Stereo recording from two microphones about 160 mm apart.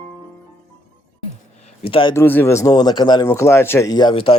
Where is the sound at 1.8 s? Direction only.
35° left (ahead or behind).